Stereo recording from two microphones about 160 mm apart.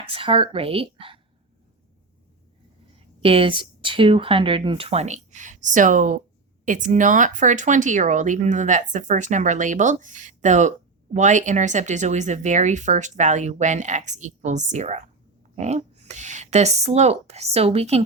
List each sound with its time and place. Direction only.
0.0 s speech: 35° right (ahead or behind)
3.2 s speech: 35° right (ahead or behind)